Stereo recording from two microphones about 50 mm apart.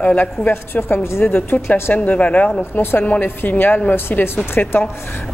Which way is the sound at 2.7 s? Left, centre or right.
Left.